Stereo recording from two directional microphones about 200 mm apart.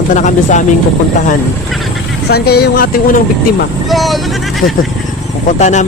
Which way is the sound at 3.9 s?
Centre (ahead or behind).